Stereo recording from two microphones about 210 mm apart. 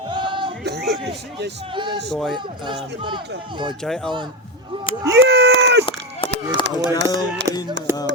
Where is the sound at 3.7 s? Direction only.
5° left (ahead or behind).